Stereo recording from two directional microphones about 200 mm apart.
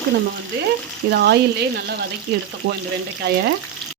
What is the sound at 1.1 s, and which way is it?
Speech, 55° right (ahead or behind).